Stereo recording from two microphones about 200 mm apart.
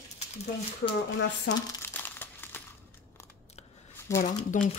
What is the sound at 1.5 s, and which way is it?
Crumpling, 10° left (ahead or behind).